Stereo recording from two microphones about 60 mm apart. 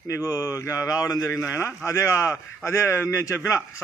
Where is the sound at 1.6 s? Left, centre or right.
Left.